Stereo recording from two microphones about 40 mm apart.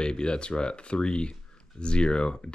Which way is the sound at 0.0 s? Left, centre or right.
Left.